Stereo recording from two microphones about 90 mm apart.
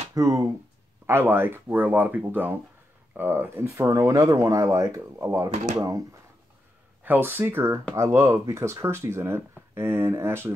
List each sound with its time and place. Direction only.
0.1 s speech: 40° right (ahead or behind)
1.0 s speech: 25° right (ahead or behind)
7.0 s speech: 20° right (ahead or behind)